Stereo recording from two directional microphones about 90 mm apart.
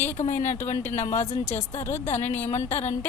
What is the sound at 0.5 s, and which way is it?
Speech, 30° left (ahead or behind).